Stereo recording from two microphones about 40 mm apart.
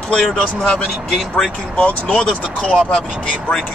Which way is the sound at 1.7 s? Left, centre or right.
Left.